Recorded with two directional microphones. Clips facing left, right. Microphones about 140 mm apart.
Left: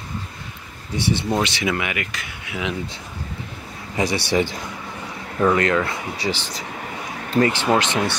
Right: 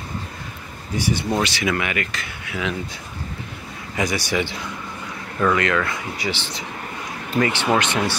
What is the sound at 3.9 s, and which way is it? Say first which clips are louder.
Speech: left 2 dB; 30° left (ahead or behind).